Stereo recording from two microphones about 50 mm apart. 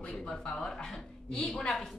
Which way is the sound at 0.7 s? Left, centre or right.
Centre.